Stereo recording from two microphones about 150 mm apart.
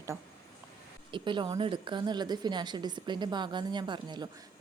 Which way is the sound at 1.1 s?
30° right (ahead or behind).